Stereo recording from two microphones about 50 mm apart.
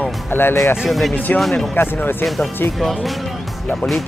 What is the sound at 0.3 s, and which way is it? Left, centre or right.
Speech, left.